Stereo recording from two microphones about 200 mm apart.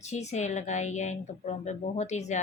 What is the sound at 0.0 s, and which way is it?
Speech, 35° left (ahead or behind).